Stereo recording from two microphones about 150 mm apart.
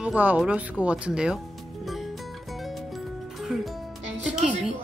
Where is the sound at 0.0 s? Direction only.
10° right (ahead or behind).